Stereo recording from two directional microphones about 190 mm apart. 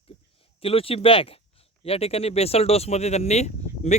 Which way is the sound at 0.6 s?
30° left (ahead or behind).